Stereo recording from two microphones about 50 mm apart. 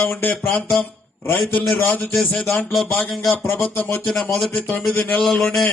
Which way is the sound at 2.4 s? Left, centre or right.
Centre.